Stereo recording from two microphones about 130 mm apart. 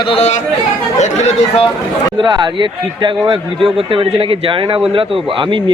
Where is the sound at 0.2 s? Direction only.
60° left (ahead or behind).